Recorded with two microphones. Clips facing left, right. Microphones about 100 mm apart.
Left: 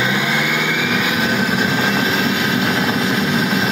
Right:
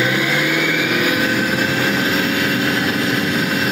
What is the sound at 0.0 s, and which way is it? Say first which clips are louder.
Vehicle: right 1 dB; 20° left (ahead or behind).